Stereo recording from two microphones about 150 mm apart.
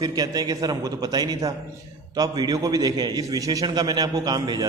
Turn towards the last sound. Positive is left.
turn(degrees=-25)  # may be behind; listen again after turning